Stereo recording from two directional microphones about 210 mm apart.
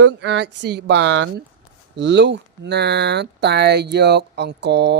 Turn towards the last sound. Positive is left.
turn(degrees=-55)  # may be behind; listen again after turning